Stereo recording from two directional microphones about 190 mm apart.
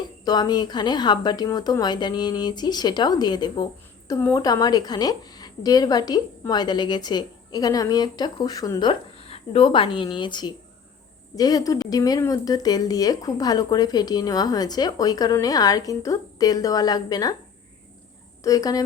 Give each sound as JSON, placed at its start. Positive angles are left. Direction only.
{"t": 0.3, "sound": "a woman's voice", "side_deg": 20}
{"t": 18.4, "sound": "a woman's voice", "side_deg": 20}